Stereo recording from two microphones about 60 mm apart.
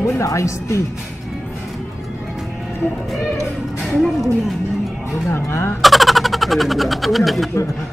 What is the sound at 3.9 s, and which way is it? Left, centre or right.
Speech, centre.